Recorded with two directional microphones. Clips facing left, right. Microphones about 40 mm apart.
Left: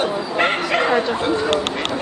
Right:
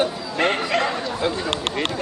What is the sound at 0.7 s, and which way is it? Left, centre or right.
Dog, centre.